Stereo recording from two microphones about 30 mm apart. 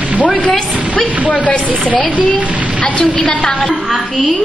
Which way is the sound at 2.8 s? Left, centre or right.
Left.